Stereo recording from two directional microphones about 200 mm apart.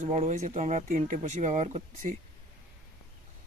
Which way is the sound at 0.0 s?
35° right (ahead or behind).